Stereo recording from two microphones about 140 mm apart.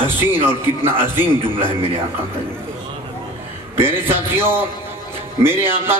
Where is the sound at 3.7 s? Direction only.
15° right (ahead or behind).